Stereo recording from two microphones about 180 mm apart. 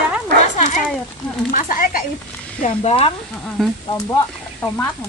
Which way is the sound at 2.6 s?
35° left (ahead or behind).